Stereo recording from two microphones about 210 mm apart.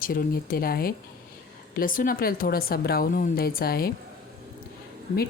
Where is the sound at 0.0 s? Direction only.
45° left (ahead or behind).